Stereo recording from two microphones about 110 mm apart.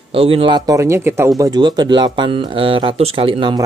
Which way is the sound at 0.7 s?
25° right (ahead or behind).